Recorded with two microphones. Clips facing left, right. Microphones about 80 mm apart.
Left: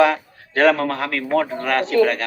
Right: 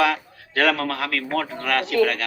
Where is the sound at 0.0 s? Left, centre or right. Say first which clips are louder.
Left 5 dB; left.